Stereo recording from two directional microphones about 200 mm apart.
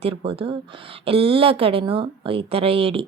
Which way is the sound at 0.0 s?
30° right (ahead or behind).